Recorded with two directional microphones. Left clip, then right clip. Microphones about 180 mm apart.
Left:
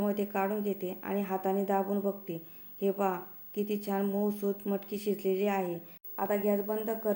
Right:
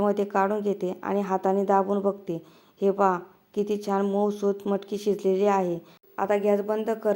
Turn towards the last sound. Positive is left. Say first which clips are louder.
# right 7 dB
turn(degrees=-30)  # may be behind; listen again after turning